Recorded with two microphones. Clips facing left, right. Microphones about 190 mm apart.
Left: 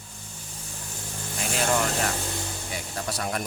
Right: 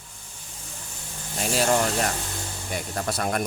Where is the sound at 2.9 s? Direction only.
50° right (ahead or behind).